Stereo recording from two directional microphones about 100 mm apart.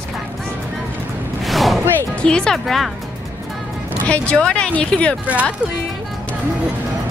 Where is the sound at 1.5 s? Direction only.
Centre (ahead or behind).